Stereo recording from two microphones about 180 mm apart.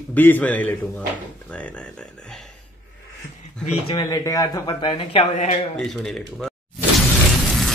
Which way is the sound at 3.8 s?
25° left (ahead or behind).